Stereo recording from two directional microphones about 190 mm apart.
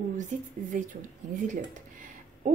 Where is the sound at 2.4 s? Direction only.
40° right (ahead or behind).